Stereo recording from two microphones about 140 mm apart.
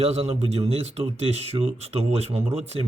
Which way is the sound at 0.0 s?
50° right (ahead or behind).